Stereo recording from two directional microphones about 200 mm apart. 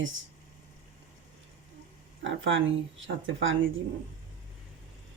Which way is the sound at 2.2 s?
70° right (ahead or behind).